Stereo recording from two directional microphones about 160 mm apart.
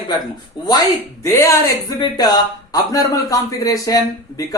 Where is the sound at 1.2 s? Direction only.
20° left (ahead or behind).